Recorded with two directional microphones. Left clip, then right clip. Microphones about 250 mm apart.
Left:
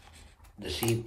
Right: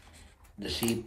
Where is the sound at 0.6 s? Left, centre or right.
Centre.